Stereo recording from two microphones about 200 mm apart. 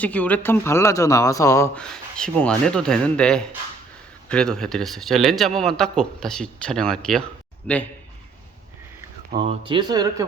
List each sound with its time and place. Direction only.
0.0 s a man's voice: 5° left (ahead or behind)
9.4 s speech: 25° right (ahead or behind)